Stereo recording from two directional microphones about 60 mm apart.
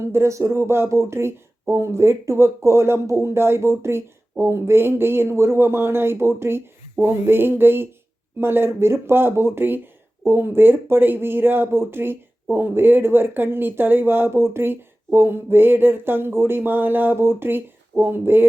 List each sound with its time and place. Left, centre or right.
0.1 s speech: right